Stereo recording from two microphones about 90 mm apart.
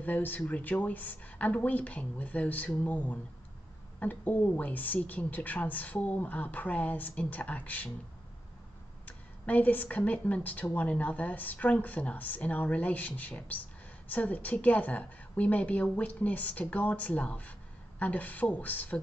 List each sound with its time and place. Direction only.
0.0 s a woman's voice: 20° left (ahead or behind)
9.0 s a woman's voice: 20° left (ahead or behind)